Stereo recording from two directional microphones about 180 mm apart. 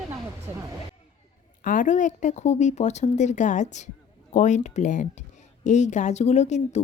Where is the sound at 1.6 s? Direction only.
45° left (ahead or behind).